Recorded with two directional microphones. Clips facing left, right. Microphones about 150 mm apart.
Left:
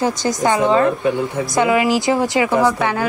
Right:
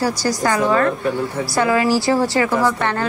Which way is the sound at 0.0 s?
20° left (ahead or behind).